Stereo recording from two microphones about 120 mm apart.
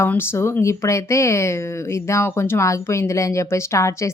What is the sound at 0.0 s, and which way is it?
Speech, 20° left (ahead or behind).